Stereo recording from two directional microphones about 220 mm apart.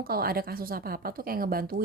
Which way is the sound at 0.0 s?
45° right (ahead or behind).